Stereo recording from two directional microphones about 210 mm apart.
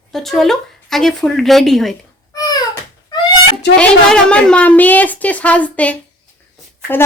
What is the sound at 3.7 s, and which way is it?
A woman's voice, 5° left (ahead or behind).